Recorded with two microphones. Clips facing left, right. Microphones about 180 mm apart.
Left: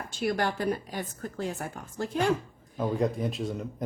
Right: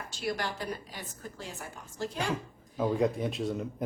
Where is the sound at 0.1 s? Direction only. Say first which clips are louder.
Left 6 dB; 55° left (ahead or behind).